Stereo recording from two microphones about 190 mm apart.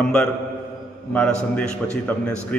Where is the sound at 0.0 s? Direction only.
5° left (ahead or behind).